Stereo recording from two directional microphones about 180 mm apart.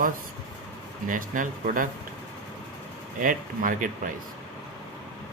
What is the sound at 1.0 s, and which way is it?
Speech, 50° right (ahead or behind).